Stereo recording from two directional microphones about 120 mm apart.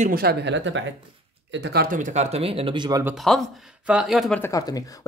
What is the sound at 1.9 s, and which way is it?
Speech, 80° right.